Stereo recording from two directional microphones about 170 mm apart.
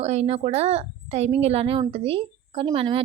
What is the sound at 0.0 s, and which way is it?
Speech, 40° right (ahead or behind).